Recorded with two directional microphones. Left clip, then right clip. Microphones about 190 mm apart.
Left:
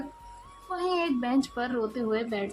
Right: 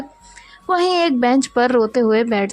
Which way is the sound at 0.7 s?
45° right (ahead or behind).